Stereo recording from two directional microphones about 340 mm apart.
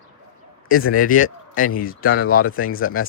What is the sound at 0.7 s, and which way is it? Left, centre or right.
Speech, left.